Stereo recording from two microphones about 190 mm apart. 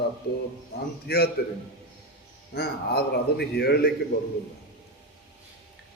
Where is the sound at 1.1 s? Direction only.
55° left (ahead or behind).